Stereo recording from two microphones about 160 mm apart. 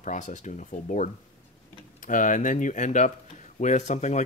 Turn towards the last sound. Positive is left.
turn(degrees=45)  # may be behind; listen again after turning